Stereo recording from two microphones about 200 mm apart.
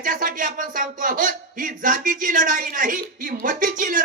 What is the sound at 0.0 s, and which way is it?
Speech, 45° right (ahead or behind).